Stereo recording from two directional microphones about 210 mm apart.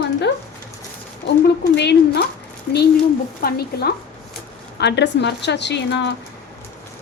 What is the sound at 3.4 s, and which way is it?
A woman's voice, 50° left (ahead or behind).